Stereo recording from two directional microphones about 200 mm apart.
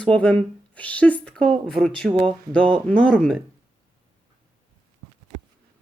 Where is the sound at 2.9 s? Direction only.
5° left (ahead or behind).